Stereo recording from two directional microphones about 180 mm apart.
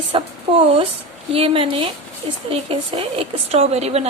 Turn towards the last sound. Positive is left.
turn(degrees=-35)  # may be behind; listen again after turning